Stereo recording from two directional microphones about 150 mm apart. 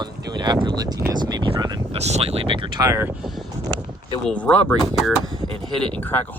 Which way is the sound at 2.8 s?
15° right (ahead or behind).